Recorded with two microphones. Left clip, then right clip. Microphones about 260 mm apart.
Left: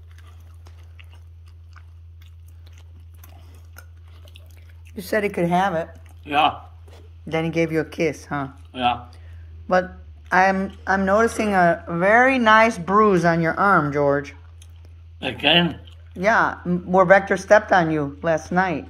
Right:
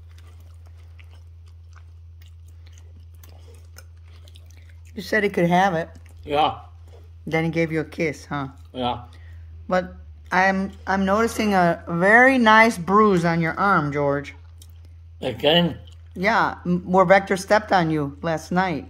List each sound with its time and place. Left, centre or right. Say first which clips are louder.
4.6 s a woman's voice: right 1 dB; centre
9.7 s a woman's voice: left 3 dB; centre
15.1 s a woman's voice: left 1 dB; right